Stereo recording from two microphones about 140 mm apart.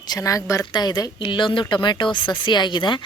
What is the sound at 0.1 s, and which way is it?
A woman's voice, 25° left (ahead or behind).